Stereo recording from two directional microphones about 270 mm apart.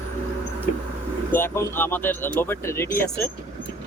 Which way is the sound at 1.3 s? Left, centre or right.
Centre.